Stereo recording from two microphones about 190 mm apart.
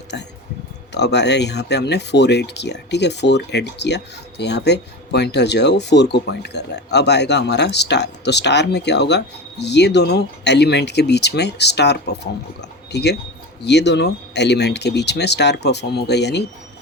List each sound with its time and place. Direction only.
0.1 s speech: 65° left (ahead or behind)